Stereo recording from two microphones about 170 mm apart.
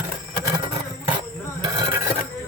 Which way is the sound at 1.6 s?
25° right (ahead or behind).